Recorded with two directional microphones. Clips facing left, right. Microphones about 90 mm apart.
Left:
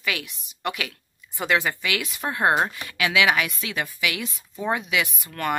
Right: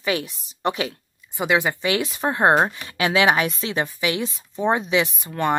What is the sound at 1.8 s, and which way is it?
Speech, 30° right (ahead or behind).